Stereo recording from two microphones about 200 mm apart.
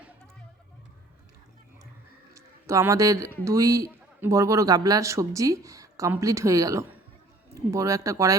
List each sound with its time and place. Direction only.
2.3 s a man's voice: 15° right (ahead or behind)